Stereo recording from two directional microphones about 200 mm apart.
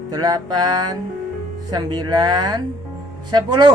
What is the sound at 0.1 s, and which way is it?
A woman's voice, 20° right (ahead or behind).